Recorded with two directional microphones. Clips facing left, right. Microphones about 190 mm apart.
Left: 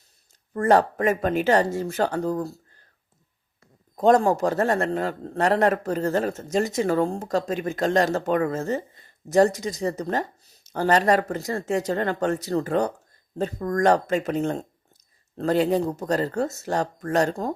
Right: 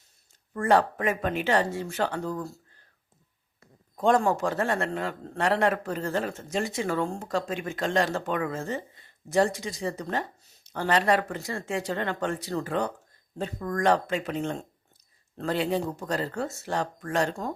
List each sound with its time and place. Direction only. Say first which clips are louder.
0.5 s a man's voice: left 4 dB; 40° left (ahead or behind)
3.9 s a man's voice: left 5 dB; 40° left (ahead or behind)